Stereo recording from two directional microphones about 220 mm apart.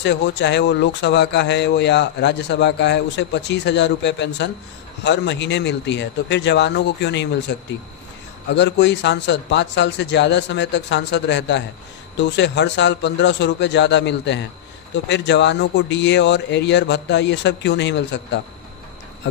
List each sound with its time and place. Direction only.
0.0 s speech: 55° left (ahead or behind)
8.5 s speech: 55° left (ahead or behind)